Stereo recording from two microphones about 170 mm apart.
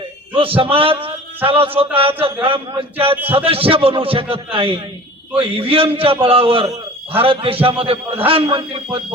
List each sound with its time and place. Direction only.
0.3 s a man's voice: 30° right (ahead or behind)